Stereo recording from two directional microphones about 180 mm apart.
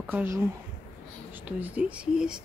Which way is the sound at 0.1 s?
15° right (ahead or behind).